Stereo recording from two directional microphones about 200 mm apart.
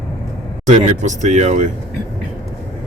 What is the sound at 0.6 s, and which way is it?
Speech, 35° right (ahead or behind).